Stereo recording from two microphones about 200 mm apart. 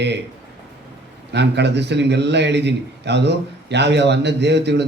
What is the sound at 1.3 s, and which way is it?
A man's voice, 60° right (ahead or behind).